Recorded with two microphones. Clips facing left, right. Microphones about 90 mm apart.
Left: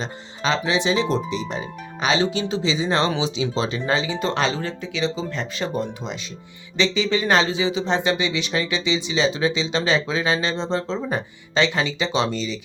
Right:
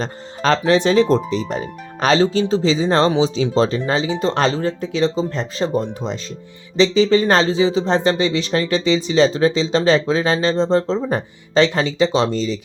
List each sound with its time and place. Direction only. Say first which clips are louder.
0.0 s speech: right 5 dB; 45° right (ahead or behind)